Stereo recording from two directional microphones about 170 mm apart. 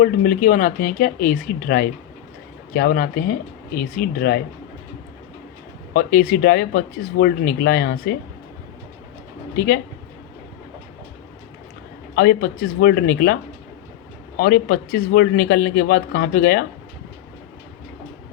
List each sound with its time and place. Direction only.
0.0 s speech: 55° left (ahead or behind)
5.9 s speech: 60° left (ahead or behind)
9.6 s speech: 65° left (ahead or behind)
12.1 s speech: 65° left (ahead or behind)